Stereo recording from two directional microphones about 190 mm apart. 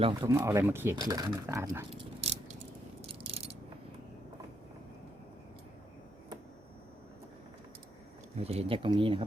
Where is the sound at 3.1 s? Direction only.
30° right (ahead or behind).